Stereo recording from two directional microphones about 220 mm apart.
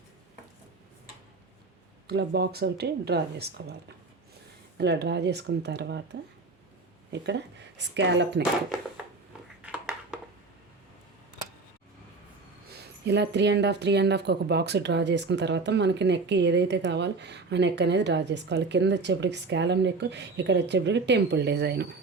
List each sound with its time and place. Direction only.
2.0 s speech: 50° right (ahead or behind)
4.8 s speech: 50° right (ahead or behind)
9.6 s a sound: 5° right (ahead or behind)
12.7 s speech: 50° right (ahead or behind)